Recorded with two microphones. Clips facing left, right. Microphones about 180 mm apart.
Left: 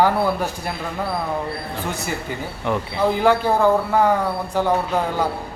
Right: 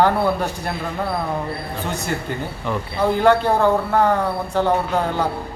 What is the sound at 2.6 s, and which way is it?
Speech, 10° left (ahead or behind).